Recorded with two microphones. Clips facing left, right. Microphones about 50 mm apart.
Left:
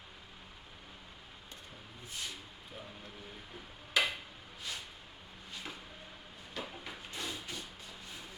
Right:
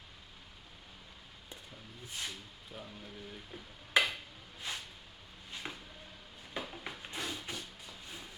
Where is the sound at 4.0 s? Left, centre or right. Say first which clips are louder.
Right 2 dB; right.